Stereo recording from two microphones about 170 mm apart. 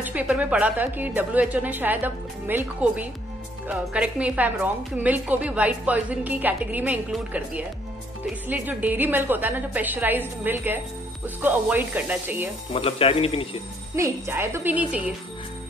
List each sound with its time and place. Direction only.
0.0 s a woman's voice: 10° right (ahead or behind)
12.7 s a man's voice: 35° left (ahead or behind)
13.9 s a woman's voice: 15° right (ahead or behind)